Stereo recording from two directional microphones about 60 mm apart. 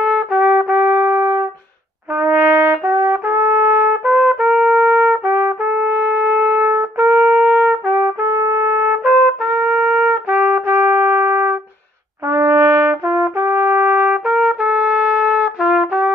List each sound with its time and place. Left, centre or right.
0.0 s trumpet: centre
7.0 s music: right
7.9 s trumpet: right
12.3 s trumpet: right
14.2 s trumpet: right